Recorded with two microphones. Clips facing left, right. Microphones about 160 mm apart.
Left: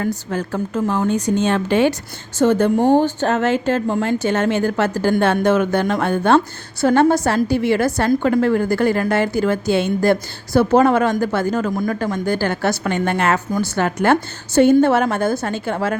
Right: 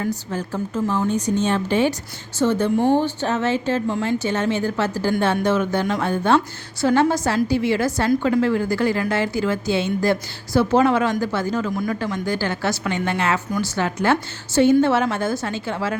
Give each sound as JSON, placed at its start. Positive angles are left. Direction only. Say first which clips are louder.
{"t": 0.0, "sound": "a woman's voice", "louder": "left 3 dB", "side_deg": 65}
{"t": 2.4, "sound": "a woman's voice", "louder": "left 4 dB", "side_deg": 50}
{"t": 10.7, "sound": "speech", "louder": "left 3 dB", "side_deg": 45}